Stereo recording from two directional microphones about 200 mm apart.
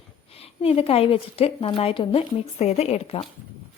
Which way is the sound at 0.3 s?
30° left (ahead or behind).